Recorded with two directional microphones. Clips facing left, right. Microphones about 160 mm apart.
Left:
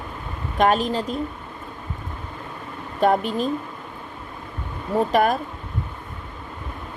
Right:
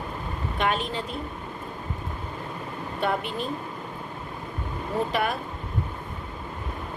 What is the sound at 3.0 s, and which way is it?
Speech, 40° left (ahead or behind).